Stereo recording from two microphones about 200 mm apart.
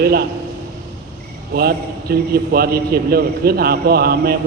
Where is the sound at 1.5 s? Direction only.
50° right (ahead or behind).